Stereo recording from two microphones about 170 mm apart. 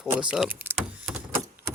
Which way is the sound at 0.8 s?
5° right (ahead or behind).